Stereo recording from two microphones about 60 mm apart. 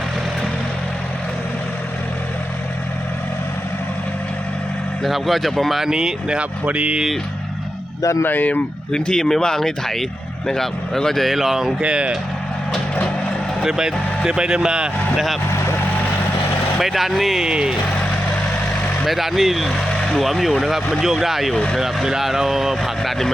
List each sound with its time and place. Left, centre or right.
5.0 s speech: centre
8.2 s speech: left
8.9 s speech: centre
11.8 s speech: centre
13.6 s speech: centre
16.8 s speech: centre
17.4 s speech: centre
19.0 s speech: centre